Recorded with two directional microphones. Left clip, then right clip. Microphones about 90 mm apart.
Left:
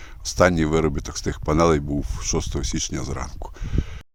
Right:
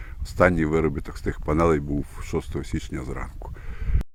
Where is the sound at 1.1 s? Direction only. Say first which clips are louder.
Left 3 dB; 40° left (ahead or behind); by 3.3 s 60° left (ahead or behind).